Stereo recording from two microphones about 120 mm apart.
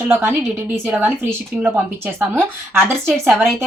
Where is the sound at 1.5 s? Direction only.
10° right (ahead or behind).